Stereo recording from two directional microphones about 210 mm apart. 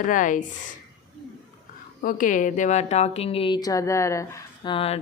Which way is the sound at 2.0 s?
40° left (ahead or behind).